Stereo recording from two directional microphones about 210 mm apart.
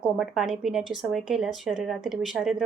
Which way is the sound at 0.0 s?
Centre (ahead or behind).